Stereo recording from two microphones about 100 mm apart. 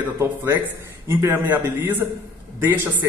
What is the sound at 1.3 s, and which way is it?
Speech, 20° right (ahead or behind).